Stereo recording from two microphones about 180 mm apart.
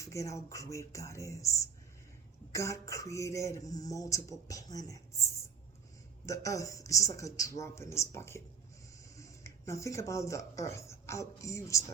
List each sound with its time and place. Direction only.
0.0 s speech: 15° left (ahead or behind)